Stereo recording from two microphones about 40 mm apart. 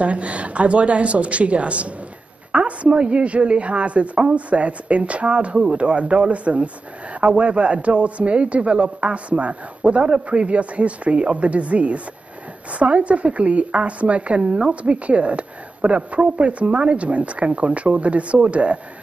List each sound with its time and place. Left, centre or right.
0.0 s a woman's voice: right